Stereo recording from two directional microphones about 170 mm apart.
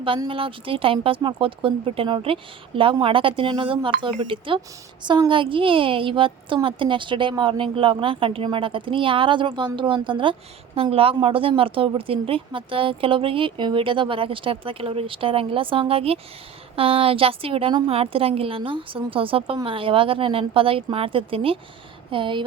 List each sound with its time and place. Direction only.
0.0 s a woman's voice: 30° right (ahead or behind)